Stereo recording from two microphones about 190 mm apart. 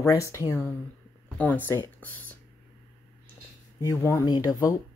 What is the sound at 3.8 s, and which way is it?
Speech, 15° left (ahead or behind).